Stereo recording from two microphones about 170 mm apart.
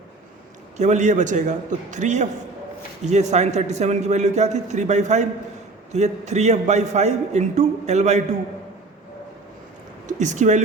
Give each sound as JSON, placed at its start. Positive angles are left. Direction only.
{"t": 0.8, "sound": "a man's voice", "side_deg": -45}
{"t": 10.1, "sound": "speech", "side_deg": -45}